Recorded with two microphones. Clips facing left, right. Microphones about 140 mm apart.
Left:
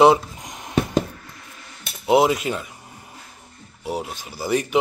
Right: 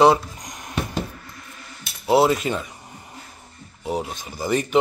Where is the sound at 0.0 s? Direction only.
20° left (ahead or behind).